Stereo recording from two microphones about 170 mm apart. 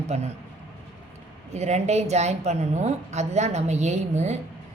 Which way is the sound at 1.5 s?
40° right (ahead or behind).